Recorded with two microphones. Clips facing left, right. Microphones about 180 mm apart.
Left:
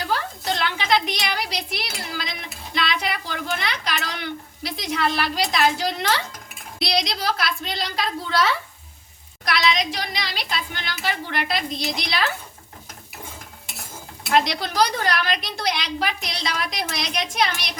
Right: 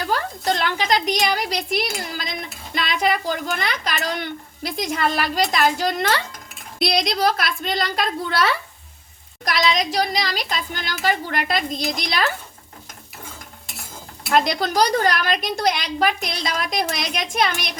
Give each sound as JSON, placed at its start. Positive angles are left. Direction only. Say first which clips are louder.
{"t": 0.1, "sound": "a sound", "louder": "right 3 dB", "side_deg": -45}
{"t": 2.7, "sound": "a child's voice", "louder": "right 4 dB", "side_deg": -50}
{"t": 9.4, "sound": "a child's voice", "louder": "right 2 dB", "side_deg": -45}
{"t": 14.3, "sound": "a child's voice", "louder": "right 2 dB", "side_deg": -45}